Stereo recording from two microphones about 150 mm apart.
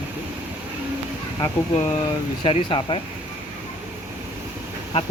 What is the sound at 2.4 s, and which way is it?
Speech, 35° left (ahead or behind).